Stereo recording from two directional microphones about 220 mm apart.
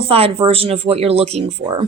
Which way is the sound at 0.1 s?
25° right (ahead or behind).